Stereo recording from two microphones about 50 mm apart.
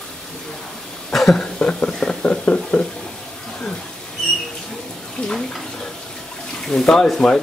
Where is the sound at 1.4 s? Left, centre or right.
Centre.